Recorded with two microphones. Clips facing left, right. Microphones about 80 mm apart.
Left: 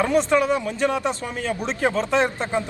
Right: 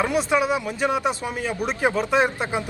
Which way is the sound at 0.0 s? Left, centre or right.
Centre.